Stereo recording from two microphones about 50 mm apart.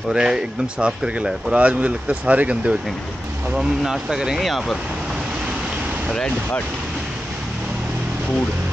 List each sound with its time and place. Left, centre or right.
0.1 s speech: centre
3.5 s speech: centre
4.4 s speech: centre